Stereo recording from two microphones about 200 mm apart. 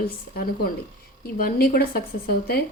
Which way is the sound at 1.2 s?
45° left (ahead or behind).